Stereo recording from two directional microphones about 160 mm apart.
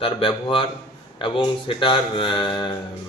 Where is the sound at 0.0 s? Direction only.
35° left (ahead or behind).